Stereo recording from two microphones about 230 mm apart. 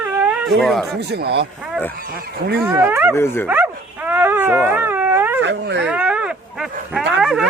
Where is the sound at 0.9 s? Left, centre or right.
Right.